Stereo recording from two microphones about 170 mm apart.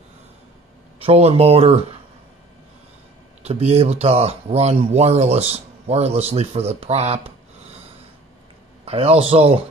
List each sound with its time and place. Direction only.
1.0 s speech: 35° right (ahead or behind)
3.4 s speech: 40° right (ahead or behind)
8.8 s speech: 35° right (ahead or behind)